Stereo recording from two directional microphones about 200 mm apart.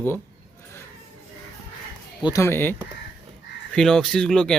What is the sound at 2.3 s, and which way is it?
Speech, 10° left (ahead or behind).